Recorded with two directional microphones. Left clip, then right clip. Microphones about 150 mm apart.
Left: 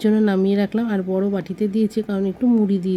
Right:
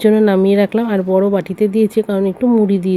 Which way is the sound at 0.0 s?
20° right (ahead or behind).